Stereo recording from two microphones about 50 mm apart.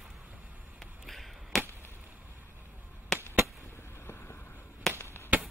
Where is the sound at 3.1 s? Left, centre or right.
Centre.